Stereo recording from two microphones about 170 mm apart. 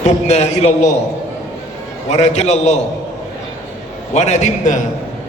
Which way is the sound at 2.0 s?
40° left (ahead or behind).